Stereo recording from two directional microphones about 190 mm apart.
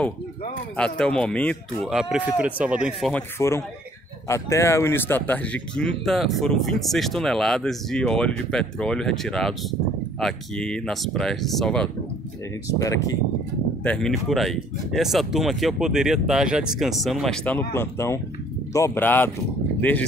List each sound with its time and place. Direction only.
0.7 s speech: 5° left (ahead or behind)
3.1 s speech: 10° left (ahead or behind)
12.6 s speech: 15° left (ahead or behind)
13.8 s speech: 5° left (ahead or behind)